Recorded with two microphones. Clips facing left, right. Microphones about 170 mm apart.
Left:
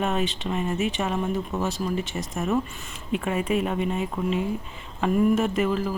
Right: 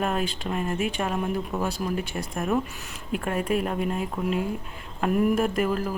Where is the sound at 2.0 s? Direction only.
55° right (ahead or behind).